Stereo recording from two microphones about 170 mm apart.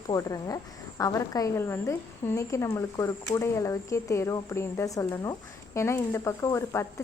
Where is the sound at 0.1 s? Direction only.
20° left (ahead or behind).